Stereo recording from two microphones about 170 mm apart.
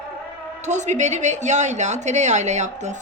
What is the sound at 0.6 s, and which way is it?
A woman's voice, 45° right (ahead or behind).